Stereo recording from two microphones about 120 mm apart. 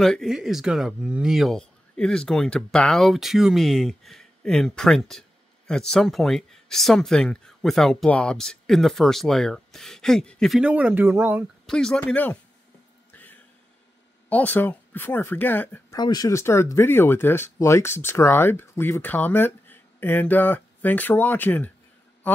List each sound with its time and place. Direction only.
0.0 s speech: centre (ahead or behind)
10.6 s speech: 10° right (ahead or behind)
11.6 s speech: 5° left (ahead or behind)
13.1 s music: 15° left (ahead or behind)
14.3 s speech: 15° left (ahead or behind)
15.9 s speech: 35° left (ahead or behind); by 21.7 s 15° left (ahead or behind)
22.2 s a sound: 15° left (ahead or behind)